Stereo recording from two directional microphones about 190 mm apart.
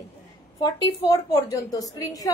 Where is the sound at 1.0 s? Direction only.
20° left (ahead or behind).